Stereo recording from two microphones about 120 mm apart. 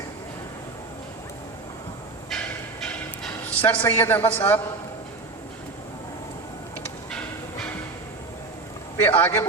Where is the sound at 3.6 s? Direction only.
20° left (ahead or behind).